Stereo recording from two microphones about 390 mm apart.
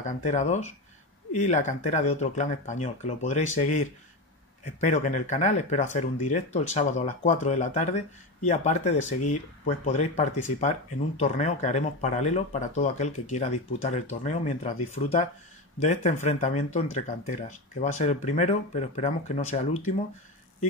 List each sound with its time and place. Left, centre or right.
0.0 s speech: centre
4.7 s speech: centre
8.9 s speech: left
9.7 s speech: centre